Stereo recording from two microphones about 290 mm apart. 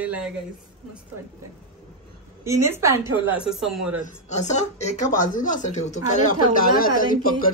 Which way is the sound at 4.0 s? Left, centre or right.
Left.